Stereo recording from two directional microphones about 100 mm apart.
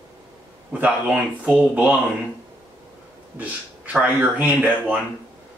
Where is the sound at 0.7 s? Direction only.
15° right (ahead or behind).